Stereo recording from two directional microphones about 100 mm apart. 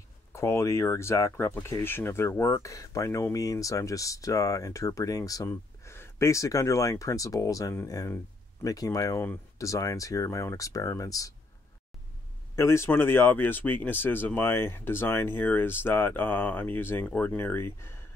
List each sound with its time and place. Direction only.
0.3 s speech: 30° left (ahead or behind)
5.5 s speech: 25° left (ahead or behind)
12.5 s speech: 25° left (ahead or behind)